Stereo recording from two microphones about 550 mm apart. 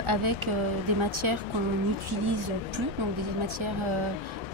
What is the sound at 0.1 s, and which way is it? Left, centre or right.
Speech, right.